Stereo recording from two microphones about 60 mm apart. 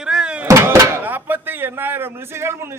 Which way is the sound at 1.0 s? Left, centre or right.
Right.